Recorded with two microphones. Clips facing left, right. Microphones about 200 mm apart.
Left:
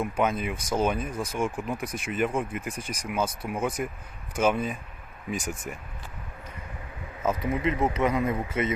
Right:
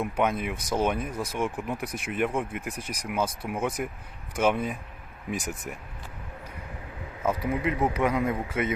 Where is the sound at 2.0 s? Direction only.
65° right (ahead or behind).